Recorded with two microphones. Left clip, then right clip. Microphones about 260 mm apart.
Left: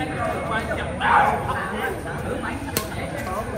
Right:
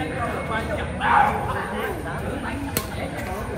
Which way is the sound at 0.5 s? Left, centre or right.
Left.